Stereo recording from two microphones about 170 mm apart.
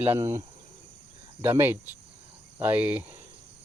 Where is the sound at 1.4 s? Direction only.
15° right (ahead or behind).